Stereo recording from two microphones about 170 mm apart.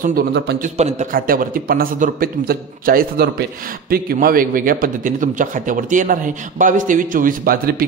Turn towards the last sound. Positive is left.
turn(degrees=-60)  # may be behind; listen again after turning